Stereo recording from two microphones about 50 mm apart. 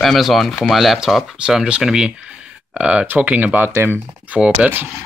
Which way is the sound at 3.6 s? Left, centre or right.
Right.